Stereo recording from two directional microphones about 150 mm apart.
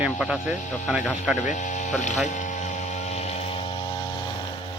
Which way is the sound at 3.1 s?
45° left (ahead or behind).